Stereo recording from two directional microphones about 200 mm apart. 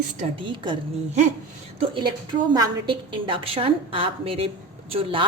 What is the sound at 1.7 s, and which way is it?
Speech, 25° right (ahead or behind).